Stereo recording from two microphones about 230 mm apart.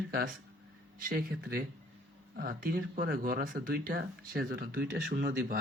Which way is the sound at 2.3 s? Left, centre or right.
Right.